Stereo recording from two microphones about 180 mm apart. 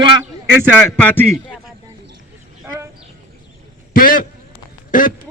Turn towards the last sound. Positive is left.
turn(degrees=50)  # may be behind; listen again after turning